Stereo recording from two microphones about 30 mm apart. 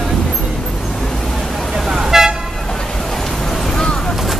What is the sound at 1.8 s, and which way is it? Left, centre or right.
Toot, centre.